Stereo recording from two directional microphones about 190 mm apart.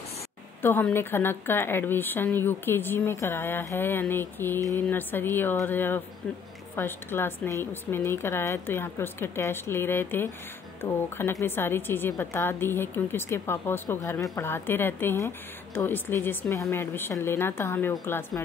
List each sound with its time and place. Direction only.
0.6 s a woman's voice: 10° left (ahead or behind)